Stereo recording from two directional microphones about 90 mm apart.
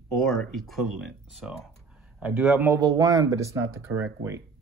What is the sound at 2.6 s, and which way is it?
Speech, 35° right (ahead or behind).